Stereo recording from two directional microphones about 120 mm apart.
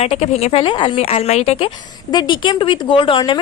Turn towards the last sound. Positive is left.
turn(degrees=45)  # may be behind; listen again after turning